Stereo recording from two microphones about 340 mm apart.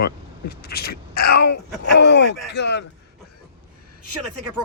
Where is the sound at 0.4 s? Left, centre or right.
Left.